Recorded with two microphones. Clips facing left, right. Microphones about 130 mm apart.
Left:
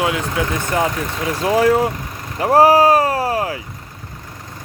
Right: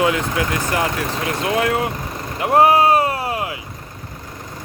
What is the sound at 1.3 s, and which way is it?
Speech, 35° left (ahead or behind).